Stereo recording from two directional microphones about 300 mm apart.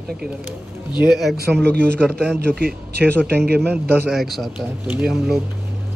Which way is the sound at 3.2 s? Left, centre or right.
Right.